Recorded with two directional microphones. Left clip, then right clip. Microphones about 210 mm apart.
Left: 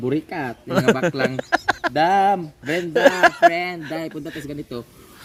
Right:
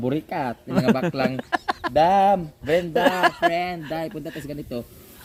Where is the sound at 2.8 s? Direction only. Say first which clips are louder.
Left 7 dB; 20° left (ahead or behind).